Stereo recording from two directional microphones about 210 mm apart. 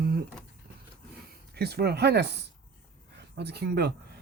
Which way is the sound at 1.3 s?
50° right (ahead or behind).